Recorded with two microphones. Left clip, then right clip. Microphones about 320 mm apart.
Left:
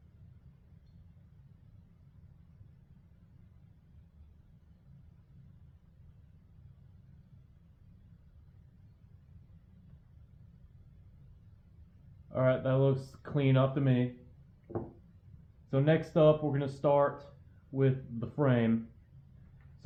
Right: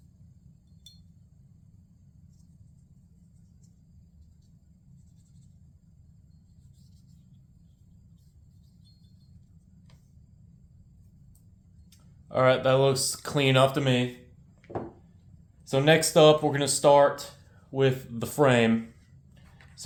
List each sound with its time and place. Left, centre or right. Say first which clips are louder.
12.3 s speech: right 8 dB; centre
15.7 s speech: right 8 dB; centre